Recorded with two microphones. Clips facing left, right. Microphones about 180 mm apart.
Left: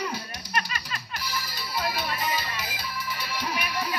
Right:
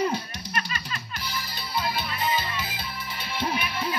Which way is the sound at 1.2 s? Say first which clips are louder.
Left 3 dB; 25° right (ahead or behind).